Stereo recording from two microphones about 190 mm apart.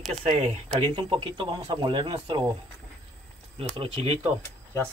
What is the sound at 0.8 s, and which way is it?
Speech, 30° right (ahead or behind).